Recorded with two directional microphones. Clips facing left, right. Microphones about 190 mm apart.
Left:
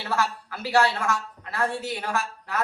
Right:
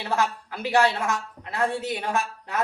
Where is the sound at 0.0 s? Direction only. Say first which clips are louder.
Right 1 dB; 15° right (ahead or behind).